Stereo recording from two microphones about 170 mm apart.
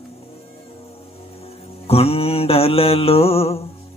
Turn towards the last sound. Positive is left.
turn(degrees=35)  # may be behind; listen again after turning